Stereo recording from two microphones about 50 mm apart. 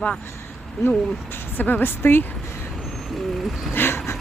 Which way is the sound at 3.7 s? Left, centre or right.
Left.